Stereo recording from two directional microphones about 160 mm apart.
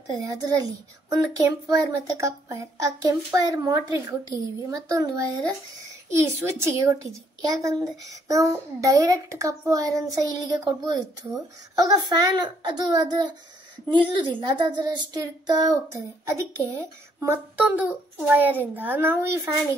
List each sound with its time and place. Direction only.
0.2 s a woman's voice: 20° right (ahead or behind)